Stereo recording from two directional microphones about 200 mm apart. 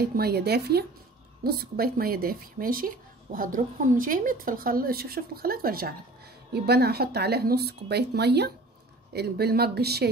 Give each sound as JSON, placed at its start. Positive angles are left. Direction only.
{"t": 0.0, "sound": "a woman's voice", "side_deg": -50}